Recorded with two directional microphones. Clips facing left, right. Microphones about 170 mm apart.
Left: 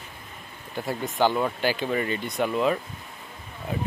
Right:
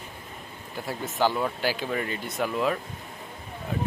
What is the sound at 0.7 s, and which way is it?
Speech, 5° right (ahead or behind).